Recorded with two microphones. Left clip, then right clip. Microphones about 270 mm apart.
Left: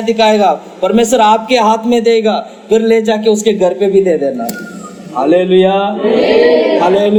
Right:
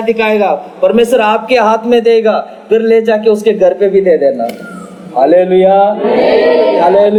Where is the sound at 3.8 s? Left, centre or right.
Centre.